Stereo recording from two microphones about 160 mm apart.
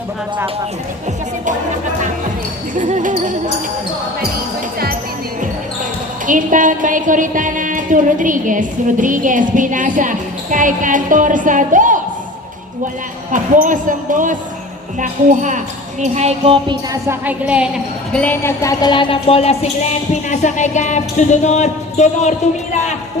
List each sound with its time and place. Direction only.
2.7 s speech: 55° right (ahead or behind)
6.2 s a woman's voice: 55° right (ahead or behind)
13.3 s a woman's voice: 55° right (ahead or behind)
16.6 s music: 20° right (ahead or behind)
17.2 s a woman's voice: 5° right (ahead or behind)
18.1 s speech: 10° left (ahead or behind); by 19.7 s 40° left (ahead or behind)
20.4 s music: 50° left (ahead or behind)